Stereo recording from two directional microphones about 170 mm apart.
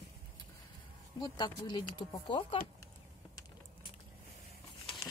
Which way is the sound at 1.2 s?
25° left (ahead or behind).